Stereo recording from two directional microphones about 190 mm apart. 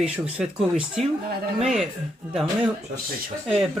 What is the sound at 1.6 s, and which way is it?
Speech, centre (ahead or behind).